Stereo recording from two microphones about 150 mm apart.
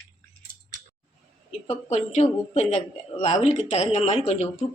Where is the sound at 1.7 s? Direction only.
45° left (ahead or behind).